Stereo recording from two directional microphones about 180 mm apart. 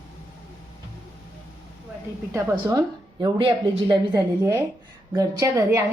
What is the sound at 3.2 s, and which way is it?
A woman's voice, 25° right (ahead or behind).